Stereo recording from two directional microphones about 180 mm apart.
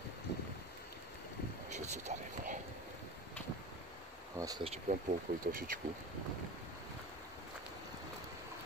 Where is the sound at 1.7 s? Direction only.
40° right (ahead or behind).